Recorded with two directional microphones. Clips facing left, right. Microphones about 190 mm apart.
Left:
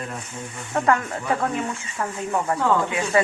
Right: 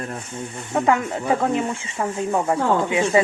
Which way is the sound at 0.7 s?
15° right (ahead or behind).